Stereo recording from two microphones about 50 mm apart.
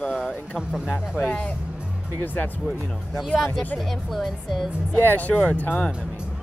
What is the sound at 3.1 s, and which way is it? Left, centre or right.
Speech, centre.